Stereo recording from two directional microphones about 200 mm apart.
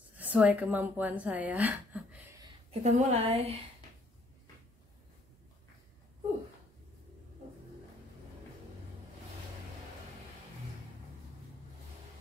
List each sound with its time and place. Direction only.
0.2 s speech: 10° right (ahead or behind)
2.7 s a woman's voice: 35° right (ahead or behind)